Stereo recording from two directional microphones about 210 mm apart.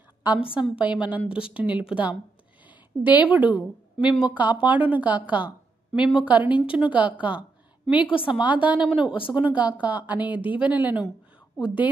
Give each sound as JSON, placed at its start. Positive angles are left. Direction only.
{"t": 0.6, "sound": "speech", "side_deg": -5}
{"t": 7.2, "sound": "a sound", "side_deg": -5}
{"t": 7.9, "sound": "a woman's voice", "side_deg": 25}
{"t": 8.3, "sound": "a woman's voice", "side_deg": -5}